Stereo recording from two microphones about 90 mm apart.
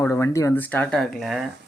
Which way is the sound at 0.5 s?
20° left (ahead or behind).